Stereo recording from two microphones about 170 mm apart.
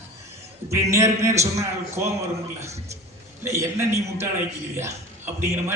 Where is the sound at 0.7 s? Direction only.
15° right (ahead or behind).